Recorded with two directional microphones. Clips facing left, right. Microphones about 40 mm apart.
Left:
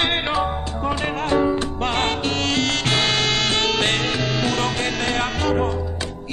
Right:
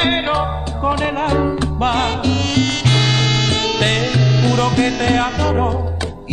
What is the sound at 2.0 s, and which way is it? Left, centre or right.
Music, left.